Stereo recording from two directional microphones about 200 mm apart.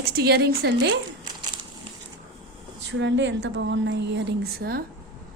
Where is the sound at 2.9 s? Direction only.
65° right (ahead or behind).